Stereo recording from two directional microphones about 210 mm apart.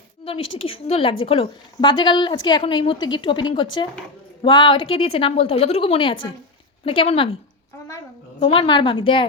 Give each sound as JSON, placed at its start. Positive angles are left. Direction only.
{"t": 0.3, "sound": "a woman's voice", "side_deg": 65}
{"t": 0.6, "sound": "a woman's voice", "side_deg": 25}
{"t": 8.4, "sound": "a woman's voice", "side_deg": 25}